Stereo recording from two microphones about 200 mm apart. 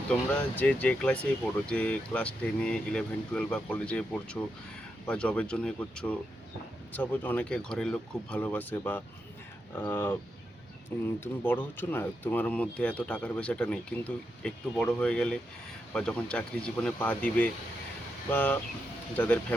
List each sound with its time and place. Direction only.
0.1 s speech: 5° left (ahead or behind)